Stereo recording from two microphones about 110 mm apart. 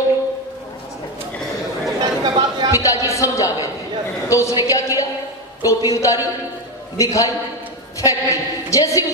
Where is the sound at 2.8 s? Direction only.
30° left (ahead or behind).